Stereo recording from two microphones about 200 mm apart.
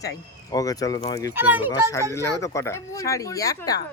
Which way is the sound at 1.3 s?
10° right (ahead or behind).